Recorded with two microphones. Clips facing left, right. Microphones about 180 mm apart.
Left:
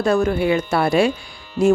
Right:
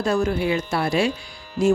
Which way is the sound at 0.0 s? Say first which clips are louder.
Left 4 dB; 60° left (ahead or behind).